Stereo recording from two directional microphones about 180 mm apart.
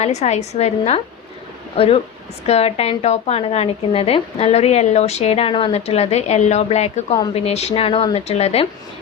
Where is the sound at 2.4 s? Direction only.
35° left (ahead or behind).